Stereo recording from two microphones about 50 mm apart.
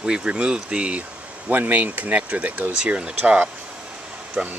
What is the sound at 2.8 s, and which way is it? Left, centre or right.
Speech, centre.